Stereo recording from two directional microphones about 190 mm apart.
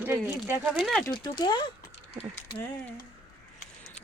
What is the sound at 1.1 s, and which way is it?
Speech, 25° left (ahead or behind).